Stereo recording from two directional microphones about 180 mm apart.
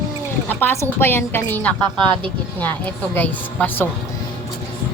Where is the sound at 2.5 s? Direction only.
10° left (ahead or behind).